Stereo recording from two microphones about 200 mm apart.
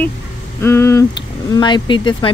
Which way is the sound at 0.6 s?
15° left (ahead or behind).